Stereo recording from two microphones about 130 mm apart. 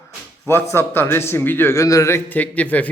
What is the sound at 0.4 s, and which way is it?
A man's voice, 20° left (ahead or behind).